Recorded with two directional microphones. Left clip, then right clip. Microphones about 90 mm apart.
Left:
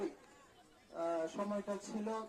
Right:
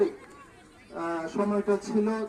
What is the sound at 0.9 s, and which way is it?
Speech, 65° left (ahead or behind).